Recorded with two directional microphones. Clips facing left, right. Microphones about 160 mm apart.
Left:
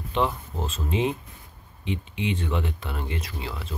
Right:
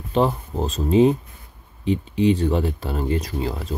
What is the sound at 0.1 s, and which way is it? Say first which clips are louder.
Speech: right 6 dB; 40° right (ahead or behind).